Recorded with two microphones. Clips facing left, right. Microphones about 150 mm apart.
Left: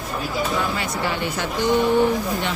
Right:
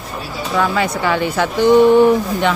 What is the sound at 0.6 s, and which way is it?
Speech, 90° right.